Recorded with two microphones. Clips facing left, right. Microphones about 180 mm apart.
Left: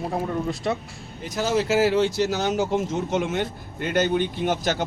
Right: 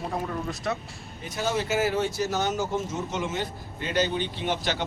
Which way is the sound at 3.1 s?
60° left (ahead or behind).